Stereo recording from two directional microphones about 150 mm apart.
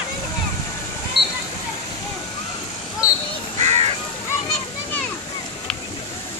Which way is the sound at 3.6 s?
45° right (ahead or behind).